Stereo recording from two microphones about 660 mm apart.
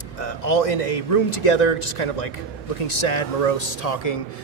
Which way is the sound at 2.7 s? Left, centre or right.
Left.